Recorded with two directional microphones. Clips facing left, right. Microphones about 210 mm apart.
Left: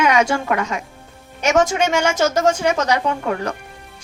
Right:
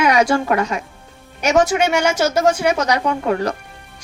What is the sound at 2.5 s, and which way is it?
Speech, 10° right (ahead or behind).